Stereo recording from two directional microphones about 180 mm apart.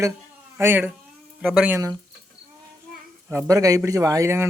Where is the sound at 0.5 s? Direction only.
10° right (ahead or behind).